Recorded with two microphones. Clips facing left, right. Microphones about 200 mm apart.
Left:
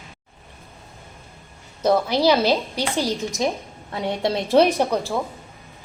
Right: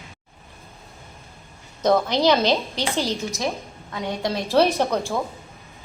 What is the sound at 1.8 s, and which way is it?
A woman's voice, 5° left (ahead or behind).